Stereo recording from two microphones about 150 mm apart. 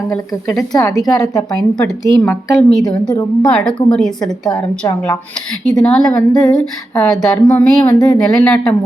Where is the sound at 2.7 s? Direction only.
5° left (ahead or behind).